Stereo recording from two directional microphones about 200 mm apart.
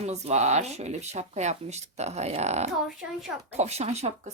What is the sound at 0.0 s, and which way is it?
Speech, 35° right (ahead or behind).